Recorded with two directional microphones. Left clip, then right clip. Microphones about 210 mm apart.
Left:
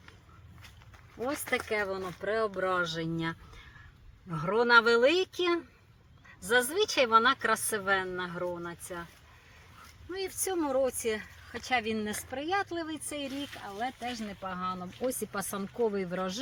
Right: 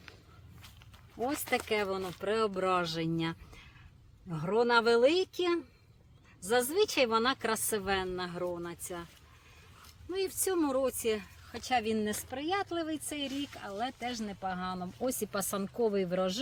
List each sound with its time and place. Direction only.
1.2 s speech: 35° right (ahead or behind)
10.4 s speech: 40° right (ahead or behind)